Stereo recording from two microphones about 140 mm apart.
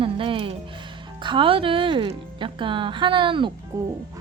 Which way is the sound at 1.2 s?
35° right (ahead or behind).